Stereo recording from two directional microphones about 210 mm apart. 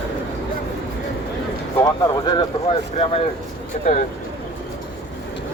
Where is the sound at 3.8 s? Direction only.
35° left (ahead or behind).